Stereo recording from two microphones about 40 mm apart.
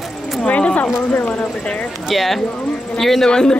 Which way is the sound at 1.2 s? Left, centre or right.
Left.